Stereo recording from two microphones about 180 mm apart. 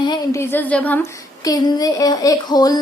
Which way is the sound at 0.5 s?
10° left (ahead or behind).